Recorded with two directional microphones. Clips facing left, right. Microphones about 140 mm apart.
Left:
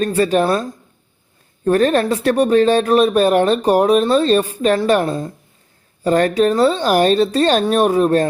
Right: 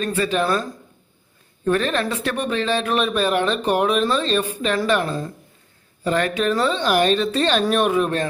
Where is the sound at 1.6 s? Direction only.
40° left (ahead or behind).